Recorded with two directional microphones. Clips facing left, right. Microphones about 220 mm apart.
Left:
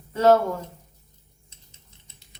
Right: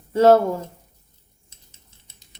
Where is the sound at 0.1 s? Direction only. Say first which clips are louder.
Right 4 dB; 30° right (ahead or behind).